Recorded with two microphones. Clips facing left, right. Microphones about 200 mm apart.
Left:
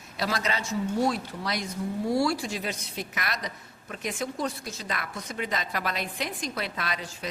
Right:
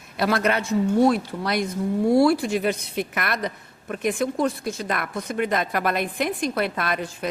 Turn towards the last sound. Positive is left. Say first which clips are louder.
# right 8 dB
turn(degrees=-55)  # may be behind; listen again after turning